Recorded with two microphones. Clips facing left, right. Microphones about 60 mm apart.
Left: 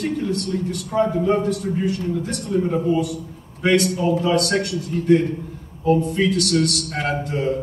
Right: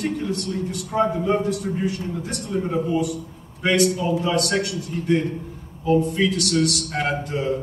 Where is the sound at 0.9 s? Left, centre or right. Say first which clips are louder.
Left 1 dB; right.